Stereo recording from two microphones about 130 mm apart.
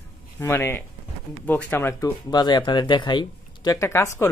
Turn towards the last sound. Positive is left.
turn(degrees=20)  # may be behind; listen again after turning